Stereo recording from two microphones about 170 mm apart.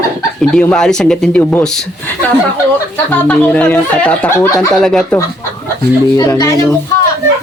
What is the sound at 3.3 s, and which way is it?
Speech, 10° left (ahead or behind).